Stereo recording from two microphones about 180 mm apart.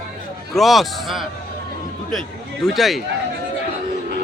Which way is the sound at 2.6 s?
Centre (ahead or behind).